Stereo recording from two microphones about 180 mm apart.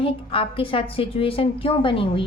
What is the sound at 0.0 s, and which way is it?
A woman's voice, 30° left (ahead or behind).